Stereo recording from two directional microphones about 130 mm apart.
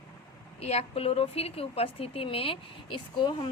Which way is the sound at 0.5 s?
50° left (ahead or behind).